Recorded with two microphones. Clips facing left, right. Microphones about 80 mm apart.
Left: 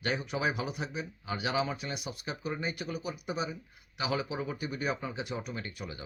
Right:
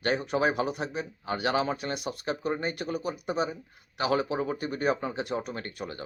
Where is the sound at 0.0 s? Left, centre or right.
Right.